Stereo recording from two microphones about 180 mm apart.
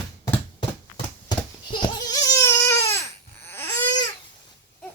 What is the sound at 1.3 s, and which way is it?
Crying, 20° left (ahead or behind).